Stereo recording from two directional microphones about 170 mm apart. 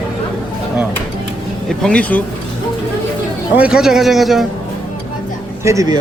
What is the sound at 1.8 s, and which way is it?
Speech, 5° left (ahead or behind).